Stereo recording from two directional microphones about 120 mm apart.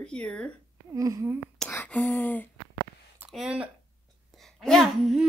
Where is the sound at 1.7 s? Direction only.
15° left (ahead or behind).